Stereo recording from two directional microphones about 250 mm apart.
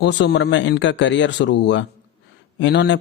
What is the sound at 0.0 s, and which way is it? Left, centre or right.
A man's voice, left.